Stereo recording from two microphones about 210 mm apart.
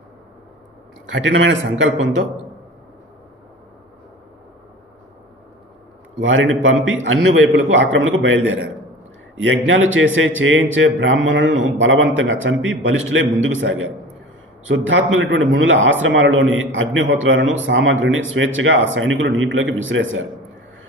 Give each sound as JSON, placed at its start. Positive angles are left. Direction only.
{"t": 1.1, "sound": "a man's voice", "side_deg": -65}
{"t": 6.1, "sound": "a man's voice", "side_deg": -65}